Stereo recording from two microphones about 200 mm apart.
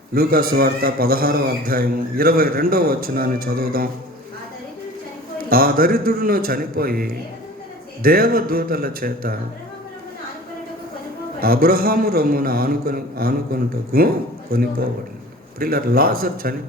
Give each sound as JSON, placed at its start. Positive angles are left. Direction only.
{"t": 0.1, "sound": "a man's voice", "side_deg": -50}
{"t": 5.5, "sound": "a man's voice", "side_deg": -45}
{"t": 11.3, "sound": "a man's voice", "side_deg": -45}